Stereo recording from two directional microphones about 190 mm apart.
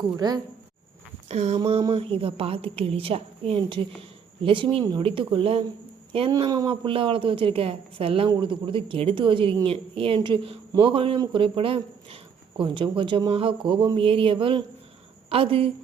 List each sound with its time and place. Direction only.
0.2 s a woman's voice: 25° right (ahead or behind)
1.3 s a woman's voice: 35° right (ahead or behind)